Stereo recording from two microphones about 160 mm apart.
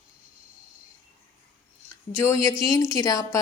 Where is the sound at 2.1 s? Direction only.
15° left (ahead or behind).